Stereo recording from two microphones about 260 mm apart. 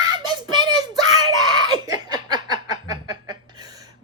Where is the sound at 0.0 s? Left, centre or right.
Centre.